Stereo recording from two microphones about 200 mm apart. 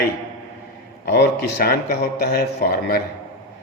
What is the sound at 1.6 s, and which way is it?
Speech, 50° left (ahead or behind).